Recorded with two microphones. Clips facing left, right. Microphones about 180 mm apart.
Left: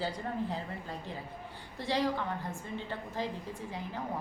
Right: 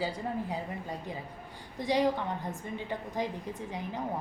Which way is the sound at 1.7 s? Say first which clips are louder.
Right 4 dB; 15° right (ahead or behind).